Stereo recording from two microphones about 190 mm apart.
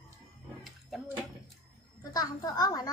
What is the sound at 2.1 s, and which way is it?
Speech, 20° left (ahead or behind).